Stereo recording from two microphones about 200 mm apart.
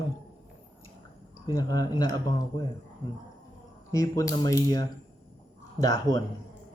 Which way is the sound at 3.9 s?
15° left (ahead or behind).